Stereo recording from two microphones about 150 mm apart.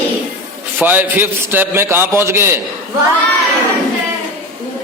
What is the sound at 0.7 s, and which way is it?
A man's voice, 10° right (ahead or behind).